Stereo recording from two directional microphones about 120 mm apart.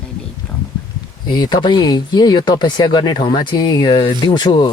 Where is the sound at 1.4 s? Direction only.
35° left (ahead or behind).